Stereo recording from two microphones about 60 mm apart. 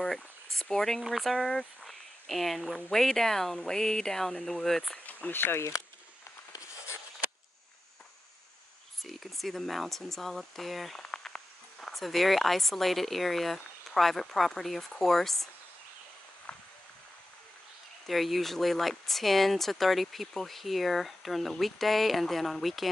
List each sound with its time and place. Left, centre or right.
0.0 s a sound: centre
1.0 s speech: centre
5.0 s speech: left
9.0 s speech: centre
18.0 s speech: centre